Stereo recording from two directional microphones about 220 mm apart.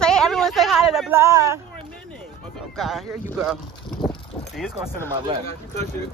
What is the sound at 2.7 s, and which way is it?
Speech, centre (ahead or behind).